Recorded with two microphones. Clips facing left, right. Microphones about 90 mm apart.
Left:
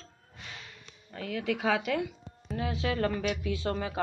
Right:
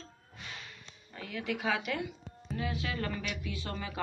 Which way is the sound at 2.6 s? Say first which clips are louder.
Left 6 dB; 70° left (ahead or behind).